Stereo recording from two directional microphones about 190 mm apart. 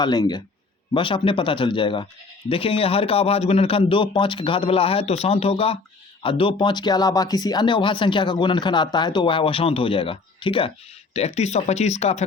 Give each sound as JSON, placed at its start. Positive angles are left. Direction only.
{"t": 0.0, "sound": "speech", "side_deg": 20}